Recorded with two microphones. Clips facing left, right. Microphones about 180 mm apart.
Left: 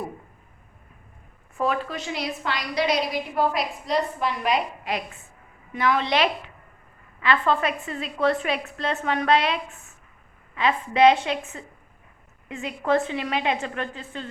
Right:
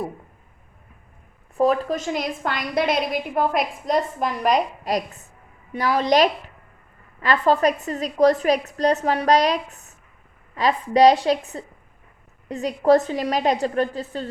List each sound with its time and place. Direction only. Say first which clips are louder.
1.5 s a woman's voice: right 6 dB; 35° right (ahead or behind)